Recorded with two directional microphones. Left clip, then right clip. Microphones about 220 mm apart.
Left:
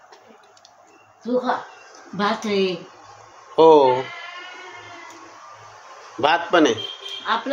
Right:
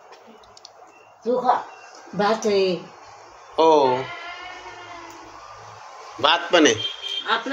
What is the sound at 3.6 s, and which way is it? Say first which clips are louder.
Speech: left 4 dB; 35° left (ahead or behind).